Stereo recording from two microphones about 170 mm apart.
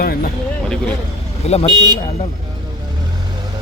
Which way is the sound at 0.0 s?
65° left (ahead or behind).